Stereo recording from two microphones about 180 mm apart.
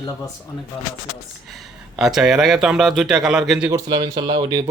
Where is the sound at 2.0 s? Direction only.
5° right (ahead or behind).